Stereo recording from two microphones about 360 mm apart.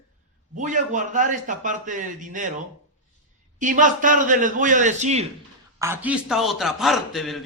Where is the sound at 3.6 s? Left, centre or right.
Right.